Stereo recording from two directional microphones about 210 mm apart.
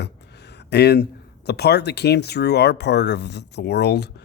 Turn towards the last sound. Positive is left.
turn(degrees=50)  # may be behind; listen again after turning